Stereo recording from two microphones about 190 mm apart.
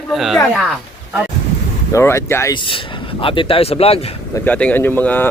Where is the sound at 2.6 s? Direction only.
25° left (ahead or behind).